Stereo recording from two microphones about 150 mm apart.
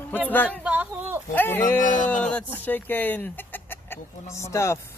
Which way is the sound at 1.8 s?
60° left (ahead or behind).